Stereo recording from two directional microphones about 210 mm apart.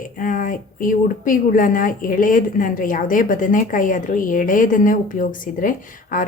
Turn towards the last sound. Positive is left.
turn(degrees=40)  # may be behind; listen again after turning